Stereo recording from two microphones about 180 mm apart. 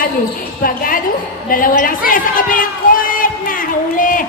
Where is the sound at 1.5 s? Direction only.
50° left (ahead or behind).